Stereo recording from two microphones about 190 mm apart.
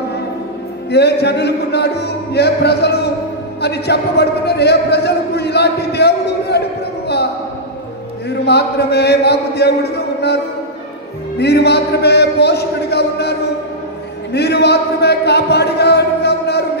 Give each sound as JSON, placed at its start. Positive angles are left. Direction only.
{"t": 0.9, "sound": "a man's voice", "side_deg": 60}
{"t": 8.5, "sound": "a man's voice", "side_deg": 60}